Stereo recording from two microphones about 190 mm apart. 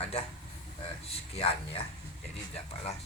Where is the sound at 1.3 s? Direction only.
30° left (ahead or behind).